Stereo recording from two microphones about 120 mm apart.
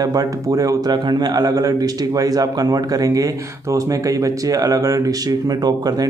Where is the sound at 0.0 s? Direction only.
30° right (ahead or behind).